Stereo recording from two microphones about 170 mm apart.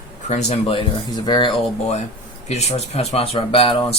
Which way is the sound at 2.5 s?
40° left (ahead or behind).